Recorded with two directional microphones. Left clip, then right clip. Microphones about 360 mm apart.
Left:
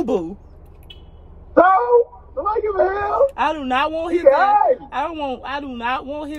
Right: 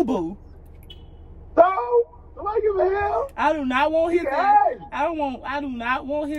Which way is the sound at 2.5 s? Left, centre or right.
Centre.